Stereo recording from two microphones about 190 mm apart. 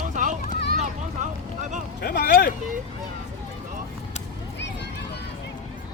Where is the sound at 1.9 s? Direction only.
60° left (ahead or behind).